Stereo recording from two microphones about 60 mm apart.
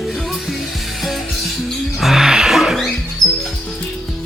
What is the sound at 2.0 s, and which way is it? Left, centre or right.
Music, centre.